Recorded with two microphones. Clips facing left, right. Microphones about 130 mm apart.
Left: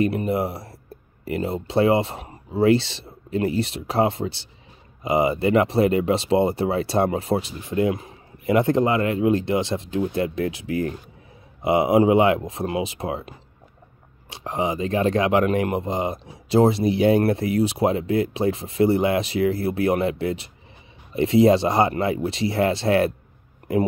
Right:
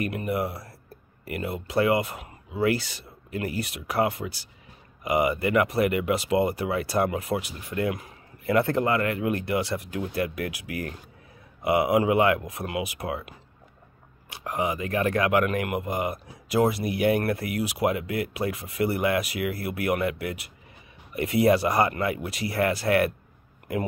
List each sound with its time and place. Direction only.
0.0 s a man's voice: 25° left (ahead or behind)
14.3 s a man's voice: 25° left (ahead or behind)